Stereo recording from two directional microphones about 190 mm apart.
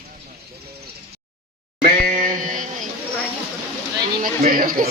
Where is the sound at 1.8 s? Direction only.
45° right (ahead or behind).